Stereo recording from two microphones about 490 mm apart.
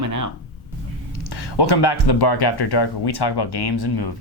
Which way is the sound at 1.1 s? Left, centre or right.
Left.